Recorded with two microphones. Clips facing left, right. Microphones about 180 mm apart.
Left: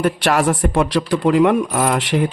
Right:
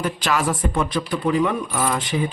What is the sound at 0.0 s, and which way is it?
Speech, 65° left (ahead or behind).